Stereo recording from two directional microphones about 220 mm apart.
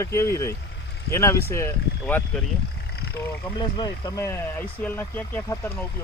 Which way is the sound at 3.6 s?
20° left (ahead or behind).